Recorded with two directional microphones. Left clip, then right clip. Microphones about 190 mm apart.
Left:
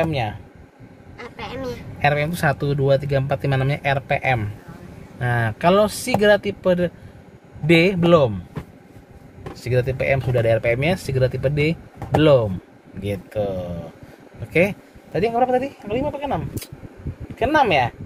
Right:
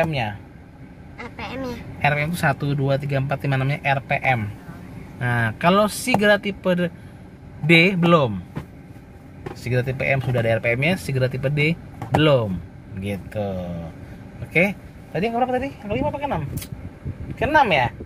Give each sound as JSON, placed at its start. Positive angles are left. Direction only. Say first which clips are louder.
{"t": 0.0, "sound": "speech", "louder": "even", "side_deg": 20}
{"t": 2.0, "sound": "speech", "louder": "left 2 dB", "side_deg": 25}
{"t": 5.2, "sound": "speech", "louder": "left 1 dB", "side_deg": 10}
{"t": 9.6, "sound": "a man's voice", "louder": "left 3 dB", "side_deg": 15}
{"t": 17.4, "sound": "a man's voice", "louder": "even", "side_deg": 40}